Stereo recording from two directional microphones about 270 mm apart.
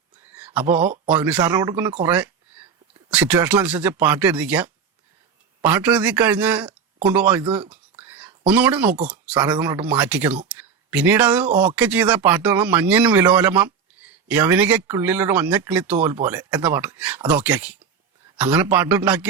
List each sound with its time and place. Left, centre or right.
0.2 s a sound: centre
0.7 s speech: right
1.0 s speech: centre